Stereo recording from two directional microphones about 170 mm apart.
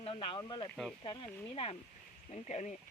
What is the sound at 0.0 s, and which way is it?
Speech, 30° left (ahead or behind).